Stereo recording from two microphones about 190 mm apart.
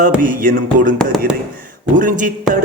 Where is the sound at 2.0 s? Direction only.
45° right (ahead or behind).